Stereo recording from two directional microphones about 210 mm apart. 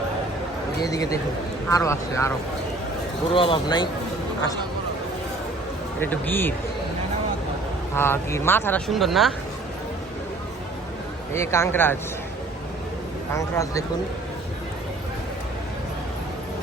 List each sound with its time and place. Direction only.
0.8 s speech: 15° left (ahead or behind)
3.3 s speech: 25° left (ahead or behind)
6.0 s speech: 10° left (ahead or behind)
7.9 s speech: 10° left (ahead or behind)
8.9 s speech: centre (ahead or behind)
11.3 s speech: 10° left (ahead or behind)
13.3 s speech: 15° left (ahead or behind)